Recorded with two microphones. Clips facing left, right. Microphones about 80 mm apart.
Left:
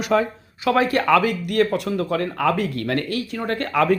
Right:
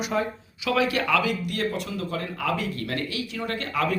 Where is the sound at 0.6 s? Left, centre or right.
Left.